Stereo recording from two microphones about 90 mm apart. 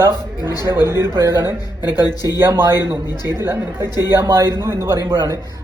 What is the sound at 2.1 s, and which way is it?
Speech, 45° left (ahead or behind).